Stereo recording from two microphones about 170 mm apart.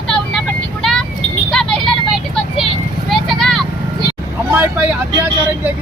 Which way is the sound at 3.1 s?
Centre (ahead or behind).